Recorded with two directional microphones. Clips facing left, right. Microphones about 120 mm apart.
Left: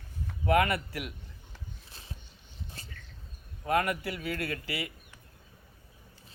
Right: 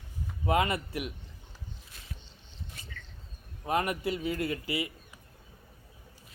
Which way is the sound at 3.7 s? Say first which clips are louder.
Left 1 dB; 20° right (ahead or behind).